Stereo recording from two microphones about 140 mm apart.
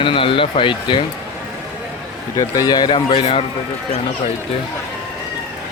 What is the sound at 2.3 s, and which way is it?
Speech, 25° left (ahead or behind).